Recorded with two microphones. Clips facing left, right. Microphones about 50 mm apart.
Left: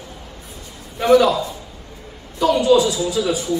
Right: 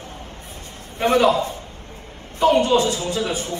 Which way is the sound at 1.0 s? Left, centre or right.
Right.